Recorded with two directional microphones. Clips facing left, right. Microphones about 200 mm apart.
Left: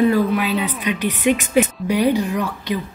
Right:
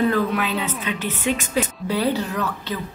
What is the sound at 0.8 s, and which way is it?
A woman's voice, 15° left (ahead or behind).